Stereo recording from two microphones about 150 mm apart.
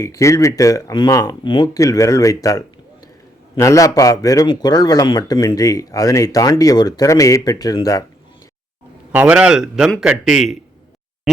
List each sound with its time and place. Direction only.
0.0 s speech: 20° left (ahead or behind)
9.1 s a man's voice: 10° right (ahead or behind)